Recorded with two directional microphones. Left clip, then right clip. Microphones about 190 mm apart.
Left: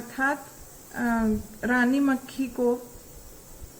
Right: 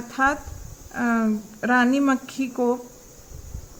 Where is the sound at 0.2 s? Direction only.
35° right (ahead or behind).